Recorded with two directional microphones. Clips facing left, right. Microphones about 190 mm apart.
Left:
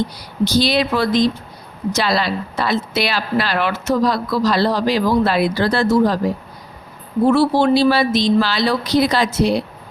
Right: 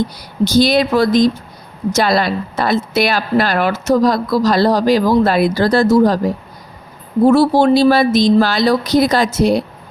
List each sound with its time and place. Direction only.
0.4 s a woman's voice: 45° right (ahead or behind)
7.3 s a woman's voice: 40° right (ahead or behind)